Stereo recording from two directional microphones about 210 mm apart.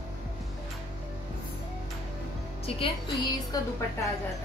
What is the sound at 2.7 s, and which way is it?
Speech, 25° left (ahead or behind).